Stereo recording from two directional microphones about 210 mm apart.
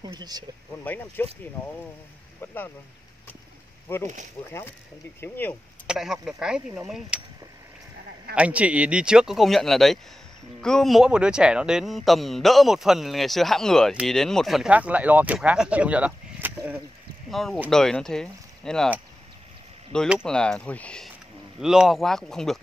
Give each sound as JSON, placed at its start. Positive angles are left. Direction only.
{"t": 0.0, "sound": "speech", "side_deg": -20}
{"t": 0.8, "sound": "speech", "side_deg": 10}
{"t": 3.9, "sound": "speech", "side_deg": 10}
{"t": 5.9, "sound": "speech", "side_deg": 0}
{"t": 8.4, "sound": "speech", "side_deg": -5}
{"t": 17.3, "sound": "speech", "side_deg": 0}